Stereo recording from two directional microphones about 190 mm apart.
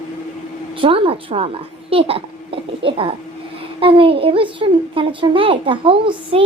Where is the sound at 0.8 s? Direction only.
30° right (ahead or behind).